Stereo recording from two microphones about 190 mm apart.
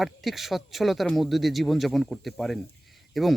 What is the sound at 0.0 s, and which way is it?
A man's voice, centre (ahead or behind).